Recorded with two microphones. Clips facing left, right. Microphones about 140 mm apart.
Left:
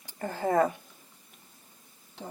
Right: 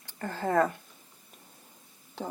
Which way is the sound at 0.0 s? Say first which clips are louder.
Left 2 dB; 15° left (ahead or behind).